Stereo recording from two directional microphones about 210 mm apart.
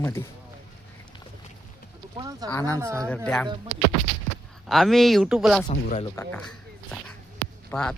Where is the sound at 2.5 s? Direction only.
15° left (ahead or behind).